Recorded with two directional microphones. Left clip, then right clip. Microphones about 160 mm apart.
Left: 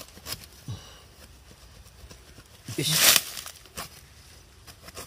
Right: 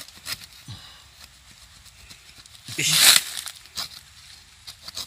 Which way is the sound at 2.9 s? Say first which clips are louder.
Right 4 dB; 45° left (ahead or behind).